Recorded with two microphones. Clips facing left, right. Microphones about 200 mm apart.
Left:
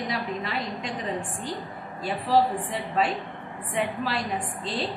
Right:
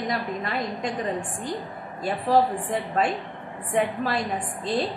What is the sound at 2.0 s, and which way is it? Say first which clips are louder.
A woman's voice: right 2 dB; 50° right (ahead or behind).